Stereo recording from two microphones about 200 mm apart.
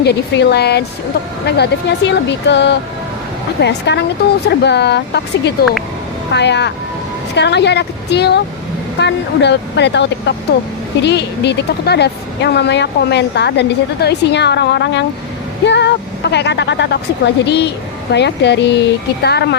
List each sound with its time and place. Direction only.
0.0 s speech: 55° left (ahead or behind)